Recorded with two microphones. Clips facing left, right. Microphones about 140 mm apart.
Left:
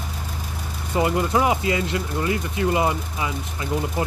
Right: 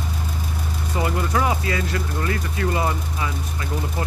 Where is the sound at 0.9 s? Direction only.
20° left (ahead or behind).